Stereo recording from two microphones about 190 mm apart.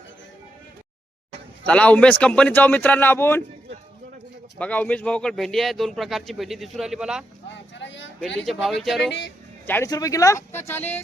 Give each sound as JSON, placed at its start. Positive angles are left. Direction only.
{"t": 1.6, "sound": "a man's voice", "side_deg": 5}
{"t": 4.5, "sound": "a man's voice", "side_deg": 5}
{"t": 7.5, "sound": "a sound", "side_deg": 70}
{"t": 8.4, "sound": "a man's voice", "side_deg": 0}
{"t": 9.6, "sound": "a man's voice", "side_deg": 10}